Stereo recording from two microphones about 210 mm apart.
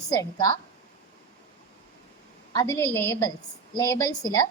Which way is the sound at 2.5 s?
15° left (ahead or behind).